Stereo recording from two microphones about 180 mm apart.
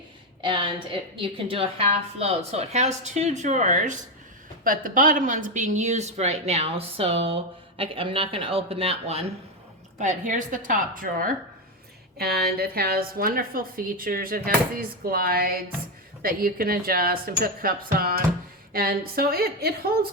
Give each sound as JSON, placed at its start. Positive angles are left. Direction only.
{"t": 0.4, "sound": "a woman's voice", "side_deg": -25}
{"t": 10.0, "sound": "a woman's voice", "side_deg": -45}
{"t": 12.1, "sound": "a woman's voice", "side_deg": -60}